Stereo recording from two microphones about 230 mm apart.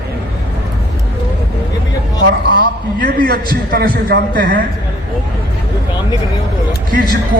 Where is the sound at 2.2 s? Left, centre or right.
Right.